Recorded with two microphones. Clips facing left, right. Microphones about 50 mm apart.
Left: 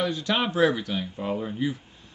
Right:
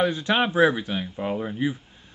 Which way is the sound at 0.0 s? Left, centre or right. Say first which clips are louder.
Right 3 dB; right.